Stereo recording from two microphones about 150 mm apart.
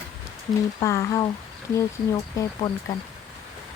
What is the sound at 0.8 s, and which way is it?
Speech, 20° left (ahead or behind).